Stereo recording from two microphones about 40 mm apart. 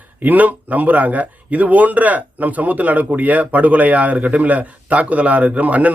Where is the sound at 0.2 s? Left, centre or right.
Right.